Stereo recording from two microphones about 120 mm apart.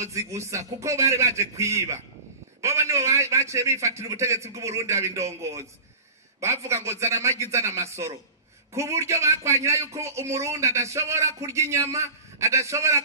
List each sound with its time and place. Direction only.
0.0 s a man's voice: 25° right (ahead or behind)